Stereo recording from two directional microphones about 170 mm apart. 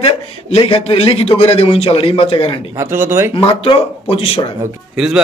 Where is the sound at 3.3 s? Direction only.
30° left (ahead or behind).